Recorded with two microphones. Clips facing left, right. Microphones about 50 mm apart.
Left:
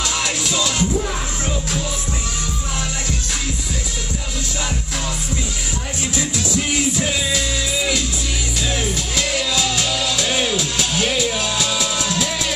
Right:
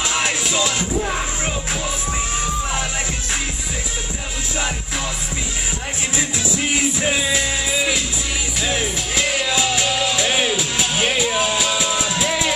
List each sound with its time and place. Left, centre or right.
0.0 s music: right
6.1 s music: centre